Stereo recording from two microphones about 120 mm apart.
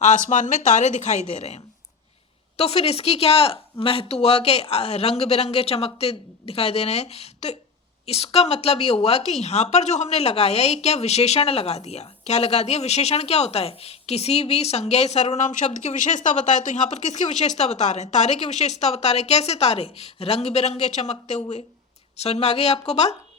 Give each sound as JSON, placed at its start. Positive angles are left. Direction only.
{"t": 0.3, "sound": "a woman's voice", "side_deg": 90}